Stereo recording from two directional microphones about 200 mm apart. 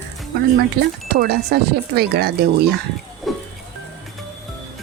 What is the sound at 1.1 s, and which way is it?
Speech, 55° right (ahead or behind).